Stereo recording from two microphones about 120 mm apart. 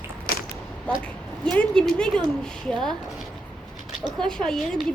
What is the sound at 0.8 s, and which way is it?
A woman's voice, 10° left (ahead or behind).